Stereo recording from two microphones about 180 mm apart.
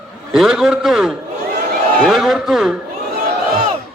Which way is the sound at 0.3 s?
Centre (ahead or behind).